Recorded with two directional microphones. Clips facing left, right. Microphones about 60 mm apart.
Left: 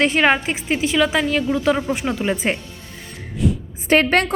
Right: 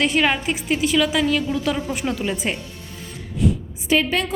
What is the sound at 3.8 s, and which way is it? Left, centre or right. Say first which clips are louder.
Speech: left 4 dB; left.